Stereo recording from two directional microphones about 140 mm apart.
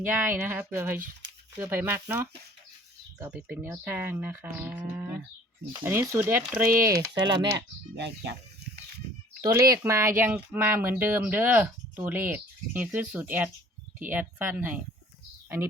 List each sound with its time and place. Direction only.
0.0 s speech: 15° right (ahead or behind)
7.1 s speech: 35° right (ahead or behind)
9.4 s speech: 20° right (ahead or behind)